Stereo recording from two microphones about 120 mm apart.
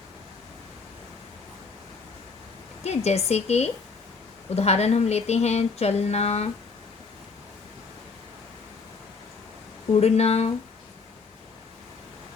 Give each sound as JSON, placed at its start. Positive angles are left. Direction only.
{"t": 2.8, "sound": "speech", "side_deg": 65}
{"t": 10.0, "sound": "speech", "side_deg": 60}